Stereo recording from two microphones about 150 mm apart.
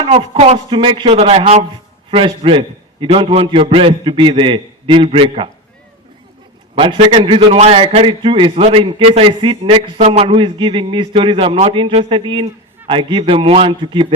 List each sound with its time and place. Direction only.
0.0 s a man's voice: 45° right (ahead or behind)
6.7 s a man's voice: 35° right (ahead or behind)
10.0 s a man's voice: 45° right (ahead or behind)